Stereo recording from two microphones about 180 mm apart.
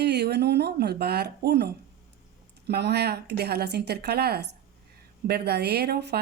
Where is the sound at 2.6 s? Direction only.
65° right (ahead or behind).